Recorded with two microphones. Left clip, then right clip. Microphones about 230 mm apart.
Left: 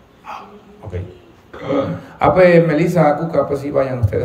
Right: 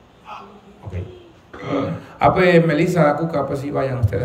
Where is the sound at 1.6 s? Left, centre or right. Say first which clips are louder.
Left 4 dB; centre.